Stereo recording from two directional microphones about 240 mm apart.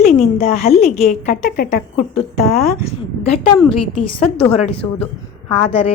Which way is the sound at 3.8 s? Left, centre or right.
Left.